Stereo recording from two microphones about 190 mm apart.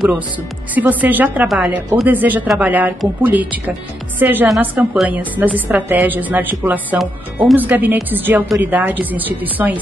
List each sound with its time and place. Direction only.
0.7 s a woman's voice: 10° right (ahead or behind)